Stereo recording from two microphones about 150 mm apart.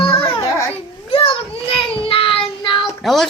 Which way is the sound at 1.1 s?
35° left (ahead or behind).